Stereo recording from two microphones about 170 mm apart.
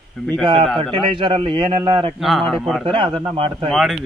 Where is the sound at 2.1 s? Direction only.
Centre (ahead or behind).